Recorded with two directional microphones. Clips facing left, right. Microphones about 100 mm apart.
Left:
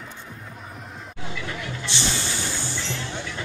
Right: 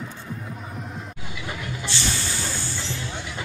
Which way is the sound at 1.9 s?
20° left (ahead or behind).